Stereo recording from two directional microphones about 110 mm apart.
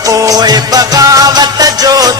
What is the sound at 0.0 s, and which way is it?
Music, 30° right (ahead or behind).